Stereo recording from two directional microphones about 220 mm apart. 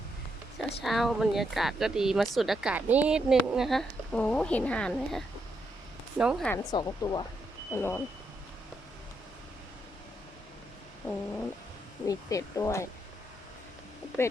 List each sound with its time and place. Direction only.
0.8 s speech: centre (ahead or behind)
6.7 s speech: 15° left (ahead or behind)
11.0 s a sound: 10° left (ahead or behind)
12.0 s speech: 15° left (ahead or behind)